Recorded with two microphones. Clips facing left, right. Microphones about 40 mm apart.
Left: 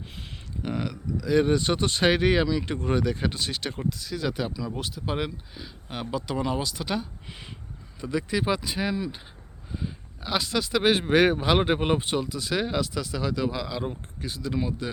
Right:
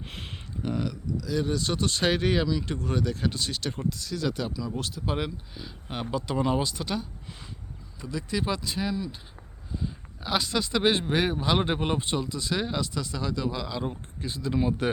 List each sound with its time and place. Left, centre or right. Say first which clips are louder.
0.0 s a sound: right 2 dB; right
0.6 s a sound: even; centre
1.3 s speech: left 6 dB; left; by 6.7 s centre
6.7 s speech: left 2 dB; centre
8.1 s speech: left 4 dB; centre
10.2 s speech: even; centre